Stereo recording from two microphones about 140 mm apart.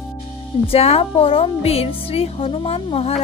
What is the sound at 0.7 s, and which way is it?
Speech, 45° left (ahead or behind).